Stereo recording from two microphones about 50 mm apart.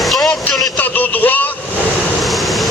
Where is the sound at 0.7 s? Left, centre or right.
Left.